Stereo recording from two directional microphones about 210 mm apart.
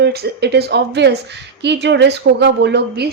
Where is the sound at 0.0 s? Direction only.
50° right (ahead or behind).